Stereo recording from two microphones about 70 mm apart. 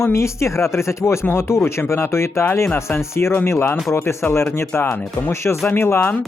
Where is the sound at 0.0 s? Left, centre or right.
Left.